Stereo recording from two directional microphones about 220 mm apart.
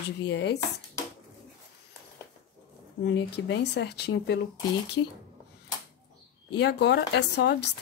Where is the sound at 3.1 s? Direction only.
55° left (ahead or behind).